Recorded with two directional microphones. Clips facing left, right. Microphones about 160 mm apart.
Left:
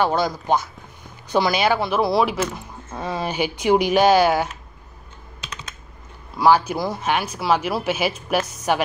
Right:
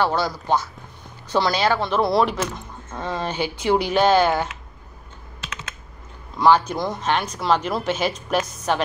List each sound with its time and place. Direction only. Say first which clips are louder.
0.0 s speech: left 1 dB; 15° left (ahead or behind)
6.3 s speech: even; 10° left (ahead or behind)